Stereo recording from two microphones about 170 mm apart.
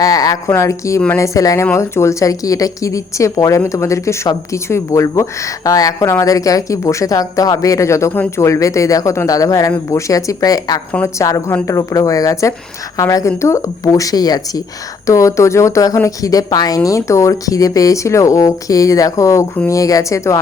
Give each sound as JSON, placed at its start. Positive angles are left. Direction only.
{"t": 0.0, "sound": "speech", "side_deg": 20}